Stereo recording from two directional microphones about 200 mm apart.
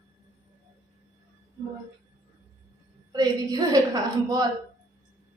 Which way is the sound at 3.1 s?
20° right (ahead or behind).